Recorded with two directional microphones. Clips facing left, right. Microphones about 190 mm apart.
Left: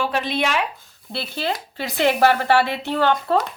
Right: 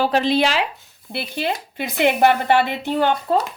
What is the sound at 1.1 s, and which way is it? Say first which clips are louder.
Speech: right 1 dB; 15° right (ahead or behind).